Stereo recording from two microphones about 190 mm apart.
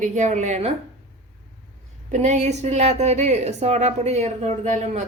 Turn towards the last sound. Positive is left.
turn(degrees=-35)  # may be behind; listen again after turning